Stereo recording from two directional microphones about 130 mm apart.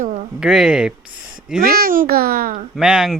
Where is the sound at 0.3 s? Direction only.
5° right (ahead or behind).